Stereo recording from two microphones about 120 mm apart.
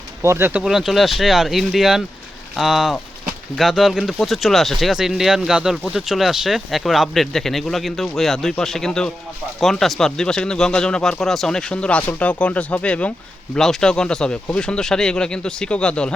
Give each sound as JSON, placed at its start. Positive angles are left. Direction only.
{"t": 0.2, "sound": "speech", "side_deg": -20}
{"t": 0.6, "sound": "speech", "side_deg": -5}